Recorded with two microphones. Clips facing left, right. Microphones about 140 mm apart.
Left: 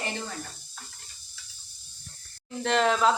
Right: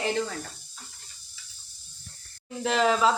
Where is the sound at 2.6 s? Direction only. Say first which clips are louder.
Right 1 dB; centre (ahead or behind).